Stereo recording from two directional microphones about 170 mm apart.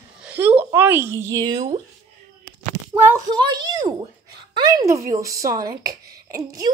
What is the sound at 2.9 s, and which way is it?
Speech, 15° right (ahead or behind).